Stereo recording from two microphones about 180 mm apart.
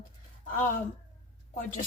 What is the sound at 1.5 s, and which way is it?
Speech, 50° left (ahead or behind).